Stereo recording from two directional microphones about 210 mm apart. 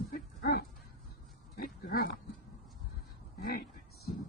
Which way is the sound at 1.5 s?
45° left (ahead or behind).